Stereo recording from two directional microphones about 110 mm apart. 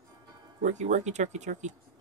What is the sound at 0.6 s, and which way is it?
Speech, 90° right.